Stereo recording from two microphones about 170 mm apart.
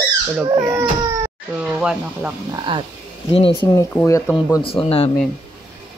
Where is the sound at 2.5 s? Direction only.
30° right (ahead or behind).